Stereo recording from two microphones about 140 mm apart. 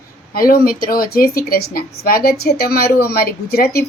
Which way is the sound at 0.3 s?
90° left.